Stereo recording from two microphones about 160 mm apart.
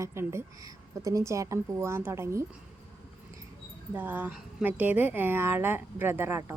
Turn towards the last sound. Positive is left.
turn(degrees=-15)  # may be behind; listen again after turning